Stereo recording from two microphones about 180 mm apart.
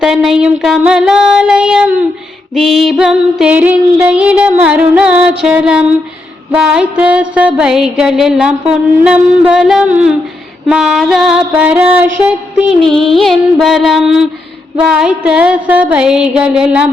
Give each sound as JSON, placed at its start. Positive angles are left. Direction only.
{"t": 0.0, "sound": "child singing", "side_deg": -5}
{"t": 2.6, "sound": "female singing", "side_deg": 0}
{"t": 6.5, "sound": "a sound", "side_deg": -5}